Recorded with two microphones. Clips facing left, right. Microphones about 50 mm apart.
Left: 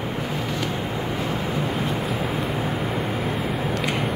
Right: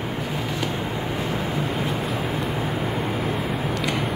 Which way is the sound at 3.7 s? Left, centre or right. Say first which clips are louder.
Even; centre.